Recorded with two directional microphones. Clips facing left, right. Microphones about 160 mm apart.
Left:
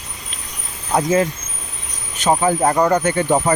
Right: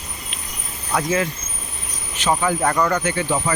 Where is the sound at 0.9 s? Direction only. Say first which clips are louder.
Left 4 dB; 30° left (ahead or behind).